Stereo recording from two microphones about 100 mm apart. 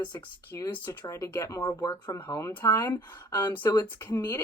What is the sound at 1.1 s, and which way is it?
Speech, 30° left (ahead or behind).